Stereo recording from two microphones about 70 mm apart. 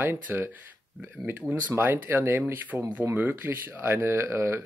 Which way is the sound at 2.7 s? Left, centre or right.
Centre.